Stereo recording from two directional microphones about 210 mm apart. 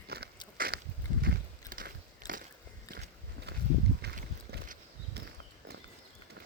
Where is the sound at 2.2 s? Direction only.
20° left (ahead or behind).